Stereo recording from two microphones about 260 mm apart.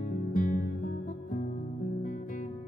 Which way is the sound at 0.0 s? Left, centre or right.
Left.